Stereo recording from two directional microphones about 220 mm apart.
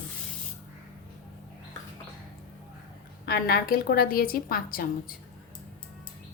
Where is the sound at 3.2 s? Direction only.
45° left (ahead or behind).